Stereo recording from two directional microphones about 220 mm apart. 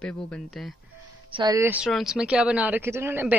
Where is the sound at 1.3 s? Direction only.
15° right (ahead or behind).